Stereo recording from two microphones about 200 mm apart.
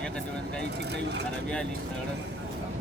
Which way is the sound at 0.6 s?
60° right (ahead or behind).